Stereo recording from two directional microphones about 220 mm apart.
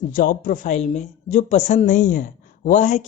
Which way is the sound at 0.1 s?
40° left (ahead or behind).